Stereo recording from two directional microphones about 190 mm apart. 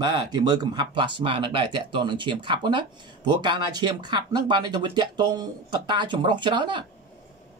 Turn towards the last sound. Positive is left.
turn(degrees=-25)  # may be behind; listen again after turning